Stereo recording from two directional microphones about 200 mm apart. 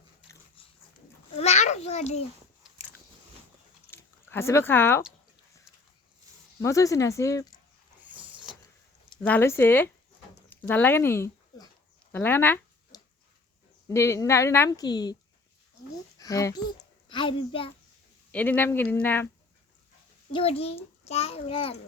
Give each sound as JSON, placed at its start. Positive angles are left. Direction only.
{"t": 1.4, "sound": "a sound", "side_deg": 35}
{"t": 3.9, "sound": "speech", "side_deg": 10}
{"t": 6.6, "sound": "a woman's voice", "side_deg": 15}
{"t": 8.0, "sound": "a sound", "side_deg": -5}
{"t": 9.2, "sound": "a woman's voice", "side_deg": 10}
{"t": 12.9, "sound": "a sound", "side_deg": 20}
{"t": 13.8, "sound": "a woman's voice", "side_deg": 15}
{"t": 16.1, "sound": "a child's voice", "side_deg": 15}
{"t": 18.3, "sound": "a woman's voice", "side_deg": 5}
{"t": 20.3, "sound": "a child's voice", "side_deg": 30}